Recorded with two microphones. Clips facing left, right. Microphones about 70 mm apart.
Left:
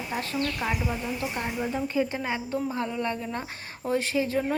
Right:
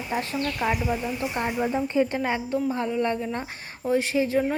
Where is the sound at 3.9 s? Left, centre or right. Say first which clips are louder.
Right 3 dB; right.